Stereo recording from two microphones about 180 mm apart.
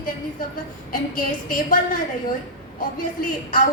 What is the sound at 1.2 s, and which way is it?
Speech, 50° left (ahead or behind).